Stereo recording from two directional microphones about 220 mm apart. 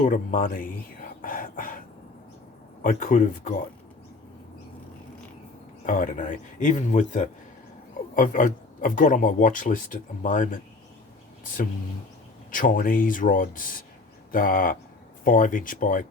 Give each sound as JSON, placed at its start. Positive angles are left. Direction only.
{"t": 0.0, "sound": "a man's voice", "side_deg": 35}
{"t": 1.2, "sound": "a sound", "side_deg": 40}
{"t": 2.8, "sound": "a man's voice", "side_deg": 40}
{"t": 5.8, "sound": "a man's voice", "side_deg": 35}
{"t": 12.5, "sound": "a man's voice", "side_deg": 35}